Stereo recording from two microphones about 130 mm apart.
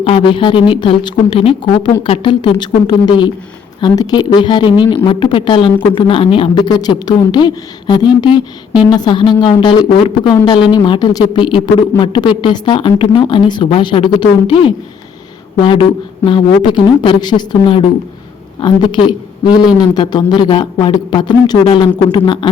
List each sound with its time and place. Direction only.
0.0 s speech: 40° left (ahead or behind)
15.6 s speech: 40° left (ahead or behind)